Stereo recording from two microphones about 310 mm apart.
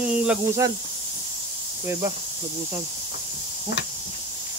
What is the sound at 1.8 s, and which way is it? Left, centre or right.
Speech, centre.